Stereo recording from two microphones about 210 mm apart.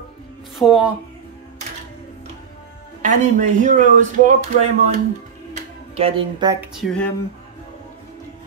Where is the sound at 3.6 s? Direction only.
35° right (ahead or behind).